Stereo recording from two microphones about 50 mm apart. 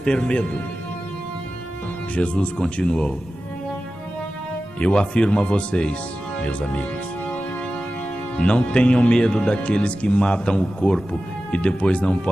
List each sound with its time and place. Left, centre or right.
0.0 s speech: centre
2.1 s speech: left
4.7 s speech: left
8.4 s speech: left